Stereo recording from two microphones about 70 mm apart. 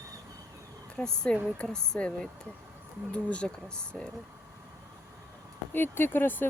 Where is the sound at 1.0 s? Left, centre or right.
Centre.